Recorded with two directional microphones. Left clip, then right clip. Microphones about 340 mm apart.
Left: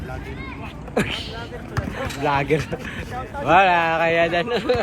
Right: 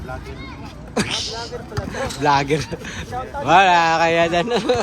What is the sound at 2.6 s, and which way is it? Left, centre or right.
Speech, right.